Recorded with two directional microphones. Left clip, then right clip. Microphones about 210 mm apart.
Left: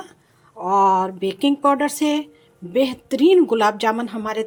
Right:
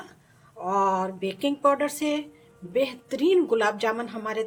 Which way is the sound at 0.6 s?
30° left (ahead or behind).